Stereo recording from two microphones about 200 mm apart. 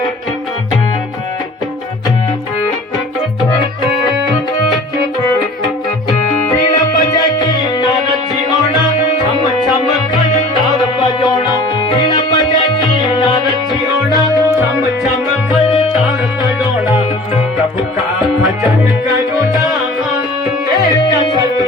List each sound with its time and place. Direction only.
6.7 s music: 20° left (ahead or behind)
10.2 s music: 20° left (ahead or behind)
15.0 s music: centre (ahead or behind)
16.4 s music: 20° left (ahead or behind)
19.5 s music: centre (ahead or behind)
20.7 s music: 20° left (ahead or behind)